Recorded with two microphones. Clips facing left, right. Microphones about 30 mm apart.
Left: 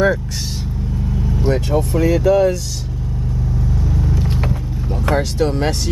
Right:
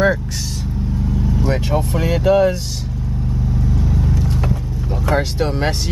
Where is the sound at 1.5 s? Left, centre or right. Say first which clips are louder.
Left 4 dB; centre.